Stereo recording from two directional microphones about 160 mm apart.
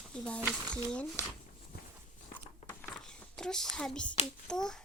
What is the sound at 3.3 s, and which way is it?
Child singing, 5° left (ahead or behind).